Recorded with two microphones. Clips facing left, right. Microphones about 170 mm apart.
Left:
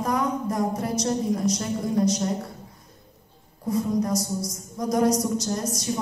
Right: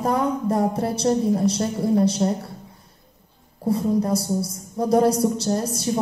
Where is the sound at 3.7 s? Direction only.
30° right (ahead or behind).